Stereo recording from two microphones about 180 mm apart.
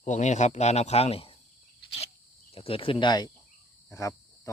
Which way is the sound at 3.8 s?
15° left (ahead or behind).